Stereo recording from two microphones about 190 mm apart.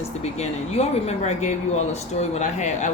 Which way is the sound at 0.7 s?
35° left (ahead or behind).